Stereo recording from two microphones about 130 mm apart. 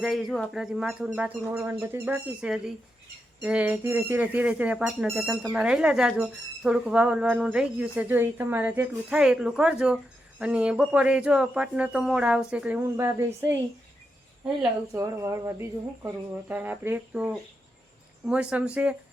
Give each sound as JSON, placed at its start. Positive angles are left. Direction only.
{"t": 0.0, "sound": "speech", "side_deg": 0}
{"t": 9.0, "sound": "speech", "side_deg": -5}
{"t": 14.9, "sound": "a sound", "side_deg": -20}
{"t": 16.5, "sound": "speech", "side_deg": -15}